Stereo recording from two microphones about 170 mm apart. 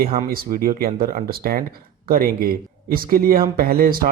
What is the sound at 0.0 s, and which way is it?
Speech, 60° right (ahead or behind).